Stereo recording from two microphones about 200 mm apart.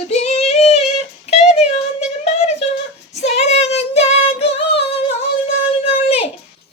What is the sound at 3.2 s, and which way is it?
Female singing, 35° left (ahead or behind).